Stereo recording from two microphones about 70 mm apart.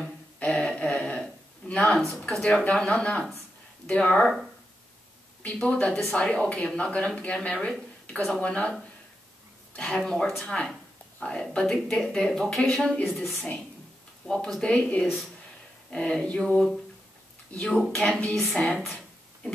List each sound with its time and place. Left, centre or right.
0.4 s a sound: centre
1.7 s speech: centre
5.4 s speech: centre
9.8 s speech: centre
14.2 s speech: centre
17.5 s speech: centre